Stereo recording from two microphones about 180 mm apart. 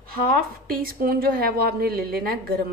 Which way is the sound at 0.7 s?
55° right (ahead or behind).